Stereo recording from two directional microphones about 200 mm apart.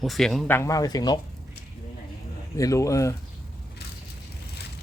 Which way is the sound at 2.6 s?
15° left (ahead or behind).